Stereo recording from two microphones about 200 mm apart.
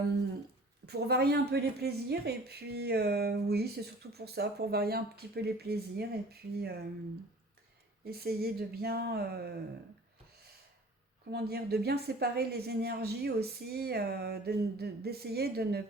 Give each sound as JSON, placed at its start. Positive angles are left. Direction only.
{"t": 0.9, "sound": "speech", "side_deg": -55}
{"t": 8.0, "sound": "speech", "side_deg": -50}
{"t": 11.3, "sound": "speech", "side_deg": -55}